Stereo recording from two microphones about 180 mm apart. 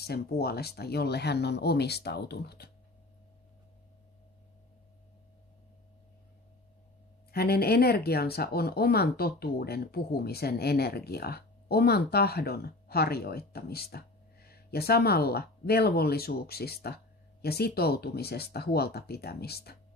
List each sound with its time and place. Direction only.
0.0 s speech: 60° left (ahead or behind)
7.3 s speech: 60° left (ahead or behind)